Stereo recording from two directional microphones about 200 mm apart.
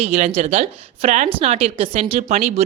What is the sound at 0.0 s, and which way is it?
Speech, 30° right (ahead or behind).